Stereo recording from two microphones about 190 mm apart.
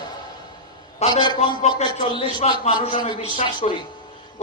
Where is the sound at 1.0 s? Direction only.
35° left (ahead or behind).